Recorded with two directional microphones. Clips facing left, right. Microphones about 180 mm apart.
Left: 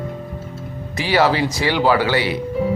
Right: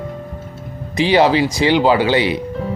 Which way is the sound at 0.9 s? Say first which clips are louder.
Right 4 dB; 20° right (ahead or behind).